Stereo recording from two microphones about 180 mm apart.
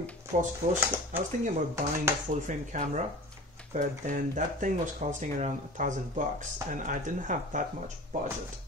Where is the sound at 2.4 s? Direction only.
45° right (ahead or behind).